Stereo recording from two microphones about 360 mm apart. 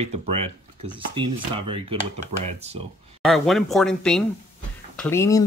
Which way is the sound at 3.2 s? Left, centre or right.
Centre.